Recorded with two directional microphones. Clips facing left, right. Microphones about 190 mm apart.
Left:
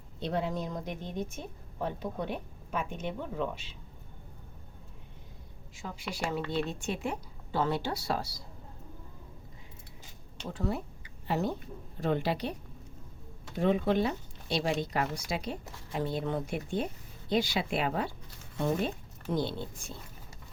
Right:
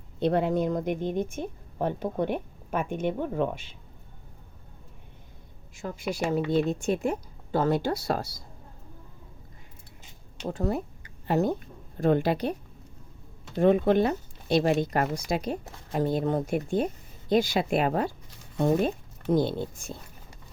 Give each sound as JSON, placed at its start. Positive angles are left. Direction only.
{"t": 0.2, "sound": "a woman's voice", "side_deg": -60}
{"t": 5.7, "sound": "speech", "side_deg": -45}
{"t": 10.4, "sound": "speech", "side_deg": -50}
{"t": 13.6, "sound": "speech", "side_deg": -50}